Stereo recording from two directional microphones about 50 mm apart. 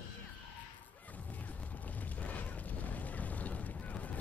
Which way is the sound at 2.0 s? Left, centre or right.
Left.